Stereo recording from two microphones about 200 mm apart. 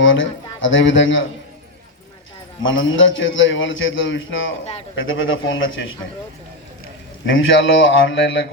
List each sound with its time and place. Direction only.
0.0 s speech: 70° left (ahead or behind)
2.6 s a man's voice: 75° left (ahead or behind)
7.3 s a man's voice: 75° left (ahead or behind)